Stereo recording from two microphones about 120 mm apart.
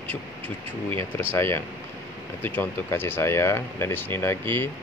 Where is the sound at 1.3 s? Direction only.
20° left (ahead or behind).